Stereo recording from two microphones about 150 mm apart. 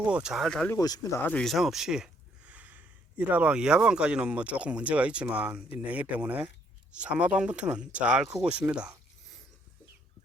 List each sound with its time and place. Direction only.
0.0 s speech: 5° right (ahead or behind)
0.7 s speech: 25° left (ahead or behind)
1.3 s speech: 5° left (ahead or behind)